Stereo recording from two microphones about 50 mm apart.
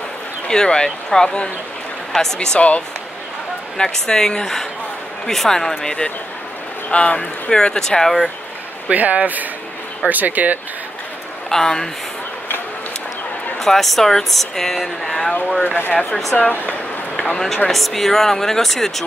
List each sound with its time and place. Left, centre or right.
0.5 s speech: centre
3.7 s a man's voice: centre
8.8 s speech: right
11.4 s speech: centre
13.6 s speech: centre
15.6 s speech: left
15.9 s a man's voice: left
17.2 s a man's voice: centre